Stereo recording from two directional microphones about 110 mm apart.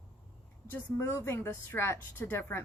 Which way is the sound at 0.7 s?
20° left (ahead or behind).